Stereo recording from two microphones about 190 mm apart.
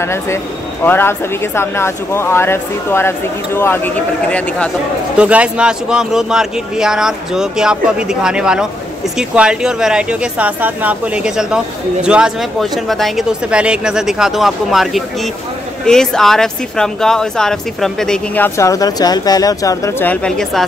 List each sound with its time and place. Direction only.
0.0 s speech: 15° left (ahead or behind)
5.1 s speech: 5° right (ahead or behind)